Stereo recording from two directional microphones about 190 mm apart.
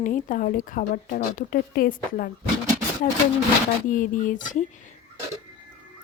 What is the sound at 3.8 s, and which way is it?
Speech, 45° left (ahead or behind).